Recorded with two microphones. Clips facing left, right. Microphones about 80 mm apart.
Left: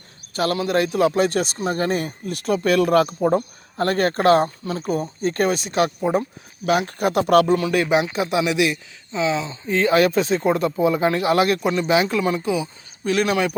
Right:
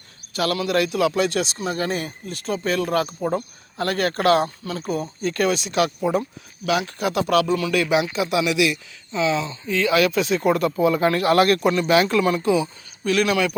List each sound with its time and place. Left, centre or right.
0.3 s speech: left
3.2 s speech: left
6.7 s speech: left
7.6 s speech: left
9.6 s speech: left; by 12.6 s centre
13.1 s speech: left